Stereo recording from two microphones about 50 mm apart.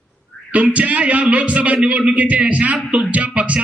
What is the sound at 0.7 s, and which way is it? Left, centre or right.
A man's voice, right.